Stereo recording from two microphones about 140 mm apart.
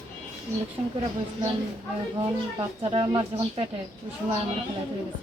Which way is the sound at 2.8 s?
40° right (ahead or behind).